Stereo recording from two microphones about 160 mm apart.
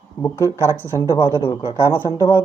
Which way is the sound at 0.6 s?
20° left (ahead or behind).